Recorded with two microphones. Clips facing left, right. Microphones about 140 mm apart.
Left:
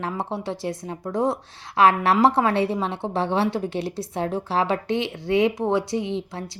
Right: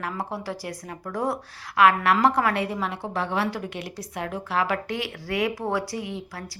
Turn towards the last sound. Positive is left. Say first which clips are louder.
# left 6 dB
turn(degrees=25)  # may be behind; listen again after turning